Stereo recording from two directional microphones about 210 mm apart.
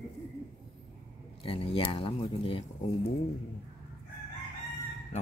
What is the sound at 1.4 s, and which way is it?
Speech, 25° left (ahead or behind).